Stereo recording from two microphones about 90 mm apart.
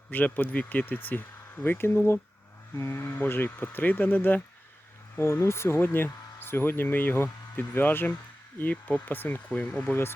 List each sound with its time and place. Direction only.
0.1 s speech: 20° left (ahead or behind)